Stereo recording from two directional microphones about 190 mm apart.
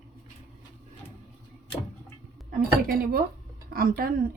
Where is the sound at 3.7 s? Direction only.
50° right (ahead or behind).